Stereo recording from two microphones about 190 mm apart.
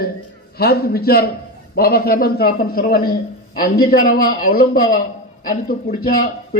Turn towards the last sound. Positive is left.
turn(degrees=50)  # may be behind; listen again after turning